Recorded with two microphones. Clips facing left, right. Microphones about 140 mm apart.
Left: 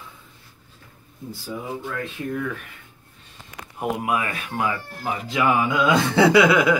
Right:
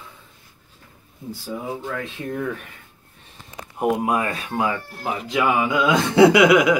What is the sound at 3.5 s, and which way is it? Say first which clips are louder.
Speech: right 5 dB; 25° right (ahead or behind).